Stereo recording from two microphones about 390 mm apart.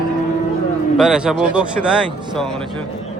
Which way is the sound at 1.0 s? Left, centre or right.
Centre.